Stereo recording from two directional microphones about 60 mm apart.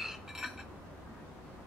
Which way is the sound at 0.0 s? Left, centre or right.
Centre.